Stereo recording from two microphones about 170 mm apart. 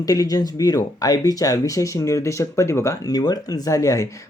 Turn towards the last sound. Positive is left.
turn(degrees=20)  # may be behind; listen again after turning